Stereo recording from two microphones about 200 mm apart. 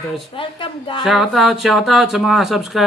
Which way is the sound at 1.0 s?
Centre (ahead or behind).